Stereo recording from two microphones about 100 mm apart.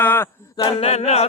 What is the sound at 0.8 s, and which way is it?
A capella, 90° left.